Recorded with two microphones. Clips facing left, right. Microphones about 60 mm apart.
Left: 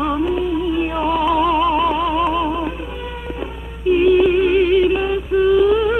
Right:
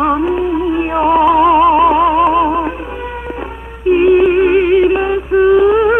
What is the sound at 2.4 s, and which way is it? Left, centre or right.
Music, right.